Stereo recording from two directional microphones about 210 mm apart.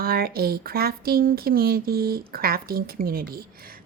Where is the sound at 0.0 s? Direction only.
45° right (ahead or behind).